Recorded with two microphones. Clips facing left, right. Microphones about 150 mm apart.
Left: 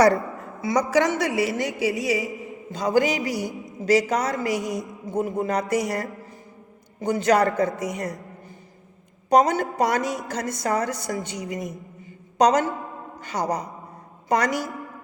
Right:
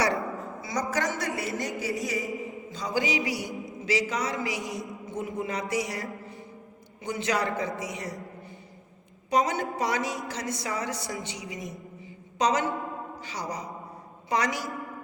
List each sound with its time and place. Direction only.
0.1 s a sound: centre (ahead or behind)
0.9 s a man's voice: 75° left (ahead or behind)
1.2 s a woman's voice: 85° left
2.6 s a woman's voice: 55° left (ahead or behind)
9.3 s a woman's voice: 45° left (ahead or behind)